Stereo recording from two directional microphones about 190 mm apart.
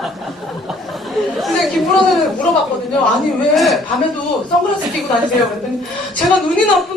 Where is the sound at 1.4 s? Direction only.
Centre (ahead or behind).